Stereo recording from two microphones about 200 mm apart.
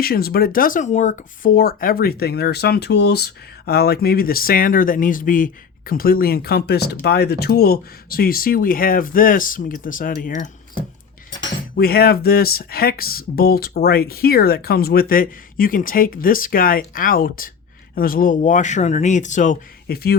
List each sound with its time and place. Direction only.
0.0 s speech: 50° left (ahead or behind)
11.7 s speech: 50° left (ahead or behind)